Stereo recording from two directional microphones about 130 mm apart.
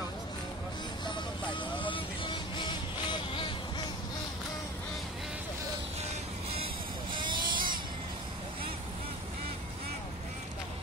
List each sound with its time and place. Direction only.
1.0 s vehicle: 40° left (ahead or behind)
7.1 s vehicle: 35° right (ahead or behind)